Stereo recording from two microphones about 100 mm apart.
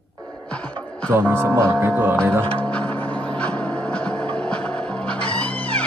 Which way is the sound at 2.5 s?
10° left (ahead or behind).